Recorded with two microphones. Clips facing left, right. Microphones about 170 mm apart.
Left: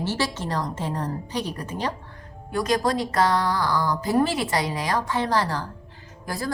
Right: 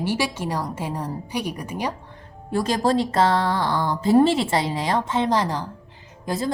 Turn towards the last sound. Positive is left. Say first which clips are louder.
# right 5 dB
turn(degrees=-20)  # may be behind; listen again after turning